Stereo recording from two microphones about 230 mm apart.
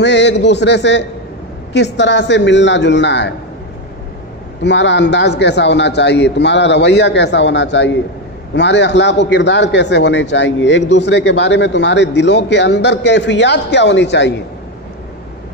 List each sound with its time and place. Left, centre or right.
0.0 s a man's voice: left
4.6 s a man's voice: left